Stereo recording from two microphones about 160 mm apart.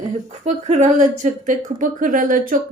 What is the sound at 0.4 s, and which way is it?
Speech, 45° right (ahead or behind).